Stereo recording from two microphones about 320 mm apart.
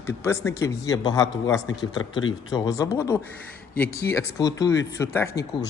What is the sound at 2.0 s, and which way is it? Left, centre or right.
Speech, left.